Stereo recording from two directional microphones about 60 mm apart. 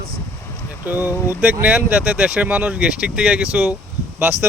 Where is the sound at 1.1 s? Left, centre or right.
Left.